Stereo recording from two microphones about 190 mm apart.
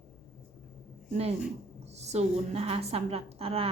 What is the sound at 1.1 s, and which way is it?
A woman's voice, 35° right (ahead or behind).